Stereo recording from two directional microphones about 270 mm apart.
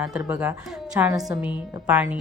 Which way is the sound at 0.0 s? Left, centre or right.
Centre.